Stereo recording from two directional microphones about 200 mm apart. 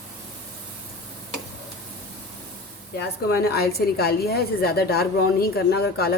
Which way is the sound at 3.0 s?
50° left (ahead or behind).